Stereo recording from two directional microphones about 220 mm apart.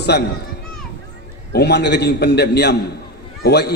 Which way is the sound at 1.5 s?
50° left (ahead or behind).